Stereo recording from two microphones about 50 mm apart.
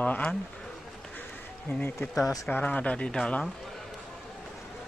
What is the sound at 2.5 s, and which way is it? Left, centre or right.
Speech, left.